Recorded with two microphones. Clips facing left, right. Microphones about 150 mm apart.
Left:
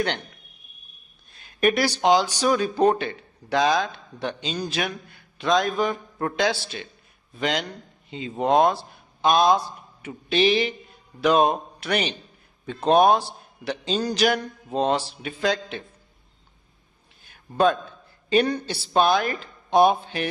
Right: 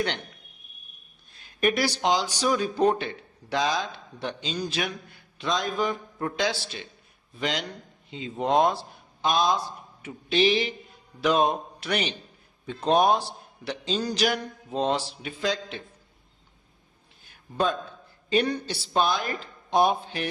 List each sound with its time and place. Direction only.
1.6 s a man's voice: 55° left (ahead or behind)
18.3 s a man's voice: 55° left (ahead or behind)